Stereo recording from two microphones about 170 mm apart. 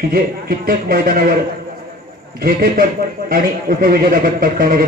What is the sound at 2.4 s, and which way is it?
Speech, 60° right (ahead or behind).